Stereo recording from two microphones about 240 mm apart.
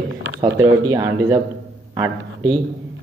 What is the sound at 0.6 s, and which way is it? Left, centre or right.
A man's voice, centre.